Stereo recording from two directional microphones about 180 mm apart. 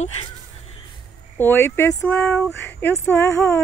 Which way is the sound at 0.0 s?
35° left (ahead or behind).